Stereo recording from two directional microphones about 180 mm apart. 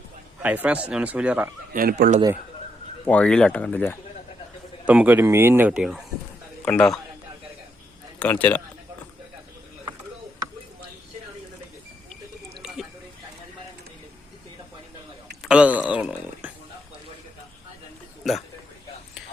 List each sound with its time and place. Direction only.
0.4 s speech: 10° right (ahead or behind)
1.7 s speech: 55° right (ahead or behind)
3.1 s speech: 5° left (ahead or behind)
4.9 s a man's voice: 10° right (ahead or behind)
8.2 s speech: 10° left (ahead or behind)
15.4 s a sound: 5° right (ahead or behind)
18.2 s a sound: centre (ahead or behind)